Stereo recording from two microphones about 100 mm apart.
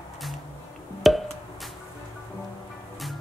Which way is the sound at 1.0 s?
Centre (ahead or behind).